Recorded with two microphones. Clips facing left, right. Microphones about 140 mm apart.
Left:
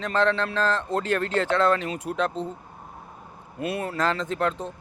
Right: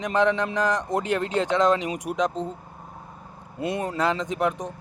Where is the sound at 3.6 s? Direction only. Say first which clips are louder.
Right 1 dB; 20° right (ahead or behind).